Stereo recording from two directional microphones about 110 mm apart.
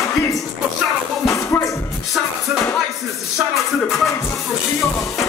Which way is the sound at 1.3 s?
30° left (ahead or behind).